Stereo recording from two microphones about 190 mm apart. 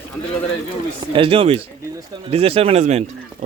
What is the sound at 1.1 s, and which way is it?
A man's voice, 30° right (ahead or behind).